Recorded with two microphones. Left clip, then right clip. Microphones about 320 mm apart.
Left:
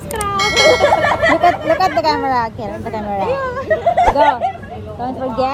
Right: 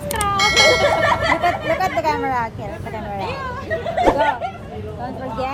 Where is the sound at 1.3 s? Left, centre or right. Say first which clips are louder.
Left 5 dB; left.